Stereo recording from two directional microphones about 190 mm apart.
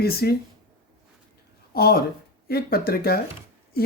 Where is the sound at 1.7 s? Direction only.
55° left (ahead or behind).